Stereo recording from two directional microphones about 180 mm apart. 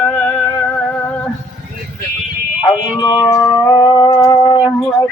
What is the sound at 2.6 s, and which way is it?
Music, 20° left (ahead or behind).